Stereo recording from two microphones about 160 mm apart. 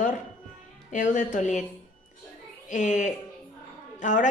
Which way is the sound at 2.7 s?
50° left (ahead or behind).